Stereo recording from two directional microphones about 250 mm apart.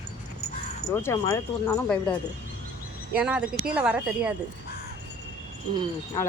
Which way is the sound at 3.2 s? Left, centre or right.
Centre.